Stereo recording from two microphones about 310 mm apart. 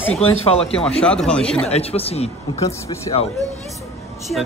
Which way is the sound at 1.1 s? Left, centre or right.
Centre.